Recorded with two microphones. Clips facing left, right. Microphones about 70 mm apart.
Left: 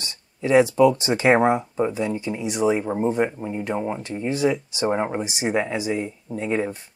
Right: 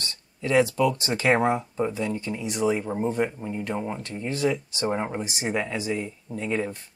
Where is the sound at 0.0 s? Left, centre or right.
Centre.